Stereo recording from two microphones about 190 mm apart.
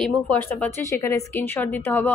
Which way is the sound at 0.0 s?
10° left (ahead or behind).